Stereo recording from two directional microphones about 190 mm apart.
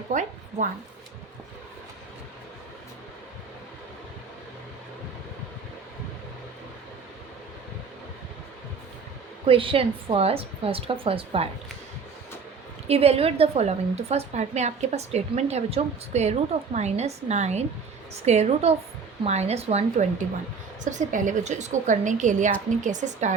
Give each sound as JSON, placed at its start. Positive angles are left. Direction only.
{"t": 0.1, "sound": "a woman's voice", "side_deg": -40}
{"t": 9.5, "sound": "a woman's voice", "side_deg": -25}
{"t": 12.9, "sound": "a woman's voice", "side_deg": -30}